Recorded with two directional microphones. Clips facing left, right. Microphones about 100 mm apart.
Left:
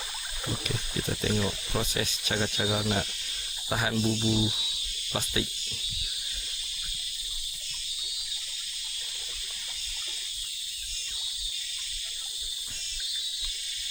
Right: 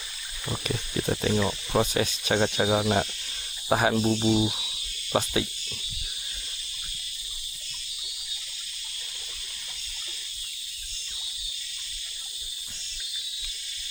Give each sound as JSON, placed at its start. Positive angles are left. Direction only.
{"t": 0.6, "sound": "speech", "side_deg": -45}